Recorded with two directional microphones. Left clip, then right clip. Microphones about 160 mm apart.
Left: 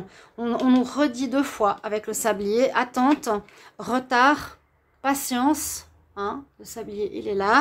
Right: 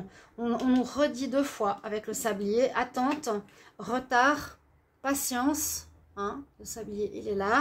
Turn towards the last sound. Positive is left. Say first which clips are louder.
# left 6 dB
turn(degrees=30)  # may be behind; listen again after turning